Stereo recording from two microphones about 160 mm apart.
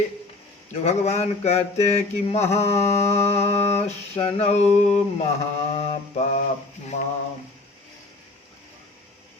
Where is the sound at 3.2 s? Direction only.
40° left (ahead or behind).